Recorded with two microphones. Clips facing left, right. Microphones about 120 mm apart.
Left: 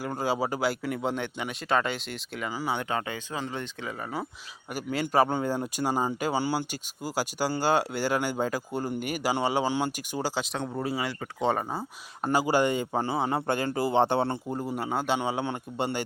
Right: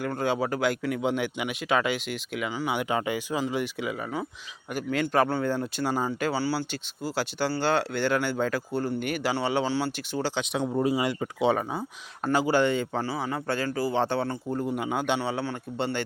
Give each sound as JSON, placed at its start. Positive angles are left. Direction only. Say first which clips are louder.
{"t": 0.0, "sound": "speech", "louder": "right 1 dB", "side_deg": 5}
{"t": 4.7, "sound": "speech", "louder": "right 1 dB", "side_deg": 5}
{"t": 10.5, "sound": "speech", "louder": "right 5 dB", "side_deg": -5}
{"t": 11.3, "sound": "speech", "louder": "right 2 dB", "side_deg": 0}
{"t": 12.2, "sound": "speech", "louder": "right 1 dB", "side_deg": 10}
{"t": 14.6, "sound": "speech", "louder": "right 4 dB", "side_deg": 5}
{"t": 15.2, "sound": "speech", "louder": "even", "side_deg": 15}